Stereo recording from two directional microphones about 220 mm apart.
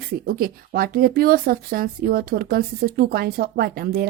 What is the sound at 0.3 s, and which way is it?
Speech, 40° right (ahead or behind).